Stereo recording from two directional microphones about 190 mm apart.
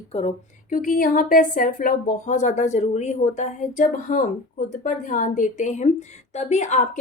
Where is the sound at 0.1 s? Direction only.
35° left (ahead or behind).